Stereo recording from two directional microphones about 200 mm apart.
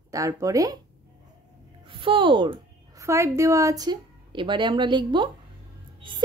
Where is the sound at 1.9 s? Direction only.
25° right (ahead or behind).